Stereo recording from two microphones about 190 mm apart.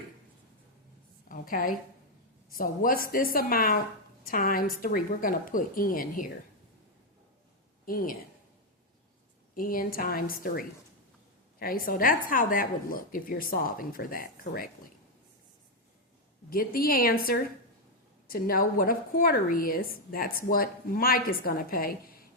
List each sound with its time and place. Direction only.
1.3 s a woman's voice: 50° left (ahead or behind)
7.9 s a woman's voice: 50° left (ahead or behind)
9.6 s a woman's voice: 50° left (ahead or behind)
16.5 s a woman's voice: 50° left (ahead or behind)